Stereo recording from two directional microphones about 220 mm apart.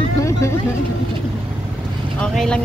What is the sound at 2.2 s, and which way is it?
Vehicle, 5° left (ahead or behind).